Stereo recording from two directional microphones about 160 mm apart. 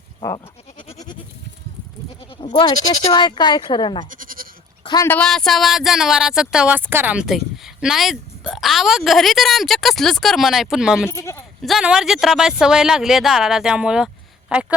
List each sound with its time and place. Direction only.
0.2 s goat: 25° left (ahead or behind)
2.4 s speech: 30° left (ahead or behind)
4.1 s goat: 60° right (ahead or behind)
4.8 s a sound: 30° left (ahead or behind)
5.0 s speech: 5° left (ahead or behind)
11.1 s speech: 15° left (ahead or behind)
11.6 s speech: centre (ahead or behind)